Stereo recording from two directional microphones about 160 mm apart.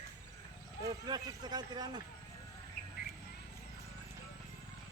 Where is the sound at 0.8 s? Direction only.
25° right (ahead or behind).